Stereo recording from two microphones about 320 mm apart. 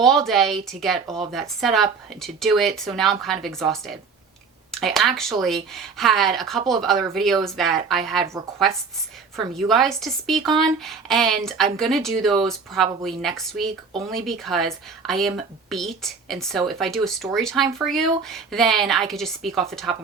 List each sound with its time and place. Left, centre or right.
0.0 s speech: centre
9.3 s speech: centre